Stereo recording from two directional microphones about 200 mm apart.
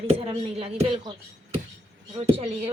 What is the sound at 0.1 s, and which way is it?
Speech, 30° right (ahead or behind).